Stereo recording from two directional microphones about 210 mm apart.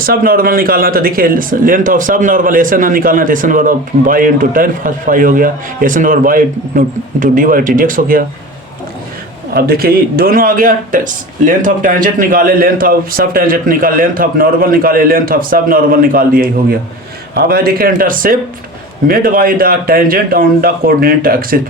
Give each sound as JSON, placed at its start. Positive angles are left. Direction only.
{"t": 0.0, "sound": "speech", "side_deg": -45}
{"t": 9.6, "sound": "speech", "side_deg": -45}